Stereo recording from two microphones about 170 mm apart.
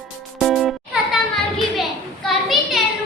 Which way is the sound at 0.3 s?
Centre (ahead or behind).